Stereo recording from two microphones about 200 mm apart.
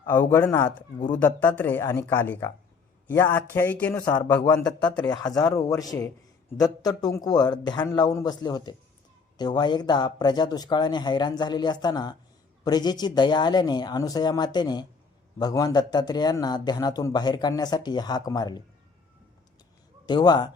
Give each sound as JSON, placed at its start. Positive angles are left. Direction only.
{"t": 0.0, "sound": "a man's voice", "side_deg": 15}
{"t": 20.1, "sound": "a man's voice", "side_deg": 20}